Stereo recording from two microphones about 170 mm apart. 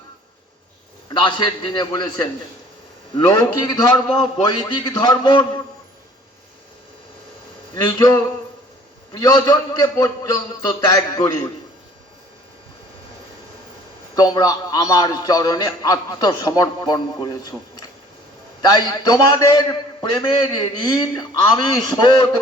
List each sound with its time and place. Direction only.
1.2 s a man's voice: 25° left (ahead or behind)
3.2 s a man's voice: 25° left (ahead or behind)
7.8 s a man's voice: 25° left (ahead or behind)
14.2 s a man's voice: 20° left (ahead or behind)